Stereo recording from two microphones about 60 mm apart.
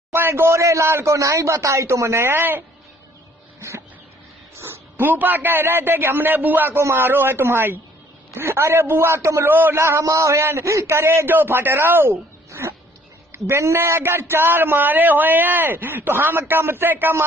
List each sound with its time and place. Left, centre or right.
0.1 s speech: right
4.6 s speech: right
6.8 s speech: right
7.1 s speech: right
9.5 s speech: right
10.0 s a man's voice: right
12.4 s a sound: right
13.3 s speech: right